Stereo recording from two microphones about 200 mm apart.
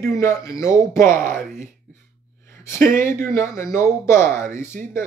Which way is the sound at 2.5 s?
15° left (ahead or behind).